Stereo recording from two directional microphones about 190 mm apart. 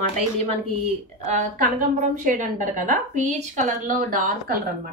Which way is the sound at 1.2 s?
40° right (ahead or behind).